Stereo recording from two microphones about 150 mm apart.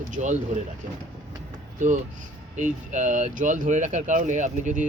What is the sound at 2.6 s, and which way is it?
Speech, 55° right (ahead or behind).